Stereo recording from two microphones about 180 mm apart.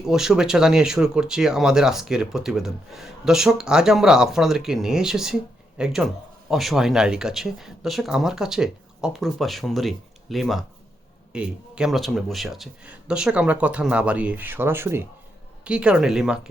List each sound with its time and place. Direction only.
0.0 s speech: centre (ahead or behind)